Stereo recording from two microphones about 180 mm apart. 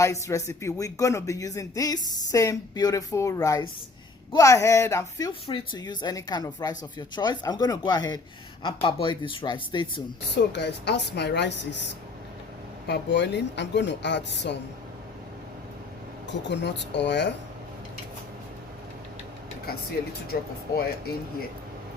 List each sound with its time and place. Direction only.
0.0 s speech: 15° left (ahead or behind)
10.5 s speech: 70° left (ahead or behind)
12.9 s speech: 75° left (ahead or behind)
16.4 s speech: 75° left (ahead or behind)
20.3 s speech: 55° left (ahead or behind)